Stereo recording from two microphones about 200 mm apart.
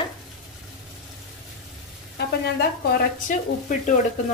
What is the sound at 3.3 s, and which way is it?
Speech, 40° left (ahead or behind).